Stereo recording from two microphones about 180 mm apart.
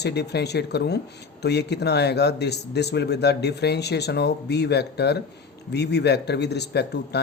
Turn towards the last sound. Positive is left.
turn(degrees=65)  # may be behind; listen again after turning